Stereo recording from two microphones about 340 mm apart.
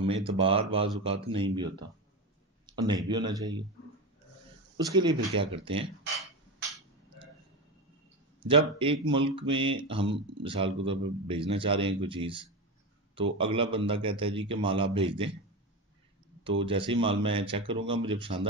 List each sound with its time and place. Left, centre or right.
0.0 s a man's voice: centre
2.6 s a sound: centre
3.1 s a man's voice: centre
4.7 s a man's voice: centre
8.4 s a man's voice: centre
16.4 s a man's voice: centre